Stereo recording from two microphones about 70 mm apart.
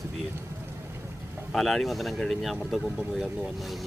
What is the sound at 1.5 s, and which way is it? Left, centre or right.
Speech, centre.